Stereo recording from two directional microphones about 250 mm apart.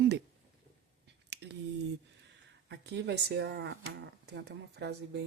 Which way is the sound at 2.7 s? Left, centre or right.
Right.